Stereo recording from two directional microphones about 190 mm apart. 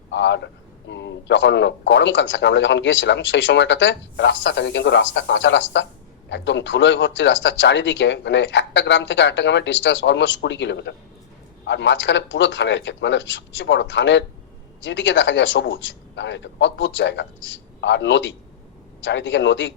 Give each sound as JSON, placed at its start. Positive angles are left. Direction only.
{"t": 0.1, "sound": "a man's voice", "side_deg": 65}